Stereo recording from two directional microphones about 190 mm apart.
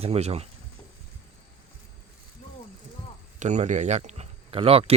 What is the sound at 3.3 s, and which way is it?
Speech, 40° right (ahead or behind).